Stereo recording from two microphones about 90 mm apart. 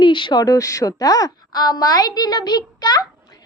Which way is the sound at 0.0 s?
60° left (ahead or behind).